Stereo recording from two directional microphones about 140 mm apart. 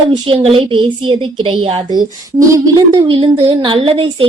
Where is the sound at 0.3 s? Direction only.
40° right (ahead or behind).